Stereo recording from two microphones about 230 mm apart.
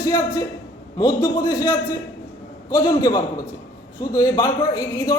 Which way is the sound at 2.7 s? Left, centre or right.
Centre.